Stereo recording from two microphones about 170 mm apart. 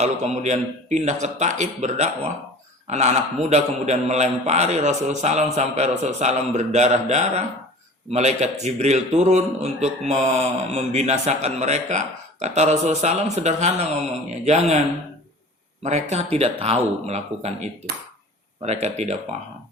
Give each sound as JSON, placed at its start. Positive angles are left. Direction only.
{"t": 0.0, "sound": "a man's voice", "side_deg": -40}
{"t": 15.8, "sound": "a man's voice", "side_deg": -40}